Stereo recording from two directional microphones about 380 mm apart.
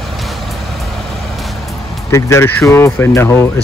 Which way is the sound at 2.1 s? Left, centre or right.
Centre.